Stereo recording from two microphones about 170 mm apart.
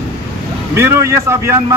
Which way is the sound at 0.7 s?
15° right (ahead or behind).